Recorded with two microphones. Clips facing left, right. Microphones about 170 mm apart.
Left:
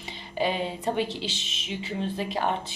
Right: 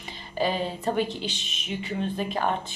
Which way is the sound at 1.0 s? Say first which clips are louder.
Right 1 dB; 90° left.